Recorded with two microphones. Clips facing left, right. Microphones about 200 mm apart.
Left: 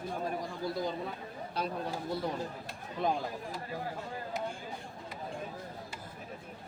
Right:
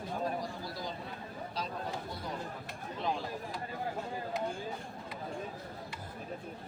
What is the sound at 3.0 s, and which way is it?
Speech, 50° left (ahead or behind).